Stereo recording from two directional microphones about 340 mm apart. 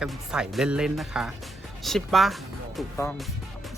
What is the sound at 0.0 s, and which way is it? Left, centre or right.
Speech, centre.